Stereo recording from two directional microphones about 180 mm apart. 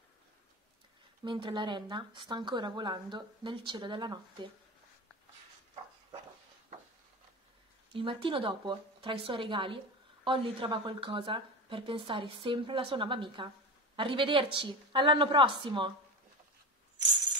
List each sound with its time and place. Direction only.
1.2 s a woman's voice: 25° right (ahead or behind)
7.9 s a woman's voice: 30° right (ahead or behind)